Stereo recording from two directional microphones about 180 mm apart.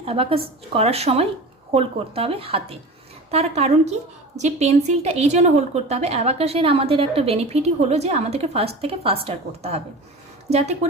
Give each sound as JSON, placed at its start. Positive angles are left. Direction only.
{"t": 0.0, "sound": "a woman's voice", "side_deg": -30}